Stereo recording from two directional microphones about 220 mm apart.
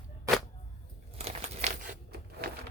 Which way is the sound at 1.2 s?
30° right (ahead or behind).